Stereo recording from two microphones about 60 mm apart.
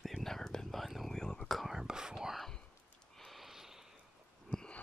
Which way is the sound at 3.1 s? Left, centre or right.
Centre.